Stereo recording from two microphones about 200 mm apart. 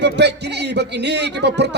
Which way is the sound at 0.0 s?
55° right (ahead or behind).